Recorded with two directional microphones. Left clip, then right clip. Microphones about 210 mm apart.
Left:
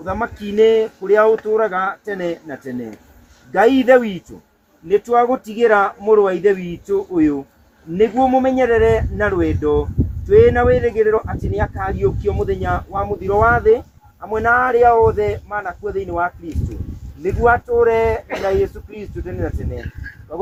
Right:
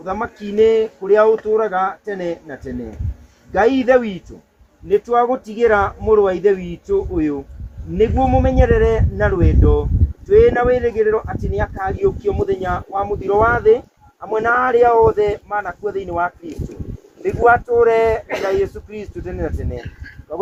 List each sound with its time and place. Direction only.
0.0 s speech: centre (ahead or behind); by 16.3 s 40° right (ahead or behind)
17.4 s speech: 40° right (ahead or behind)
19.7 s a sound: 15° right (ahead or behind)